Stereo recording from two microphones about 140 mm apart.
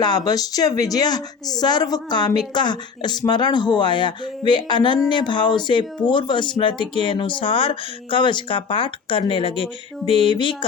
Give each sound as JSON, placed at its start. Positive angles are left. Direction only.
{"t": 0.0, "sound": "speech", "side_deg": 30}